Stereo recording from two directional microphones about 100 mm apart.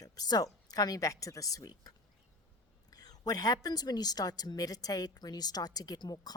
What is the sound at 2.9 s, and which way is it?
A woman's voice, 40° left (ahead or behind).